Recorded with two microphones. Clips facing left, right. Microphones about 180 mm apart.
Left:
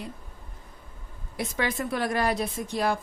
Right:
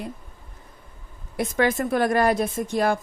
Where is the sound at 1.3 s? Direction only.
50° right (ahead or behind).